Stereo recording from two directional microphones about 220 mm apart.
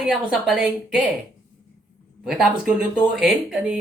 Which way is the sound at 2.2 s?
Centre (ahead or behind).